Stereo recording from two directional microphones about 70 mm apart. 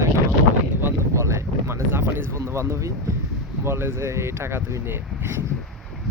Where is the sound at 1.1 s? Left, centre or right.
Right.